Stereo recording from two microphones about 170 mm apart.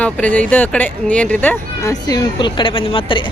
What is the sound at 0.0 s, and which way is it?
Speech, 10° left (ahead or behind).